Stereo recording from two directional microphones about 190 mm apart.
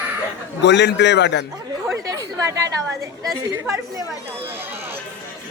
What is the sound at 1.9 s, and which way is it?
A woman's voice, 15° right (ahead or behind).